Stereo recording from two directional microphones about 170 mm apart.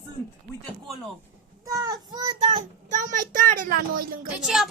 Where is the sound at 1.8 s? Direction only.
20° right (ahead or behind).